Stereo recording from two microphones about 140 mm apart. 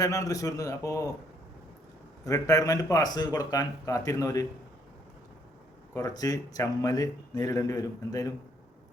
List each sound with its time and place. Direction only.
0.0 s speech: 25° left (ahead or behind)
2.2 s speech: 25° left (ahead or behind)
5.9 s speech: 25° left (ahead or behind)